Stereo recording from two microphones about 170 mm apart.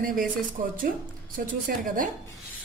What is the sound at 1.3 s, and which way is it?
Speech, 55° right (ahead or behind).